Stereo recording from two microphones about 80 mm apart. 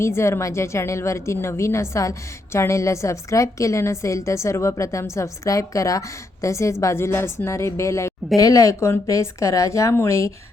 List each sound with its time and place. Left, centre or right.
0.0 s a woman's voice: left